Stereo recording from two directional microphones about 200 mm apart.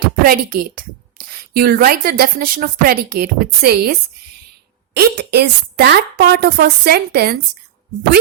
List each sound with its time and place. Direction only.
0.3 s a woman's voice: 45° right (ahead or behind)
4.9 s a woman's voice: 55° right (ahead or behind)